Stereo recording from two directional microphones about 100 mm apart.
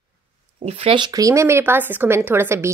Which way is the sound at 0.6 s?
85° right.